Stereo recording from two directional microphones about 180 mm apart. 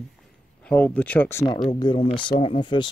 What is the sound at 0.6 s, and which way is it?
Speech, 5° left (ahead or behind).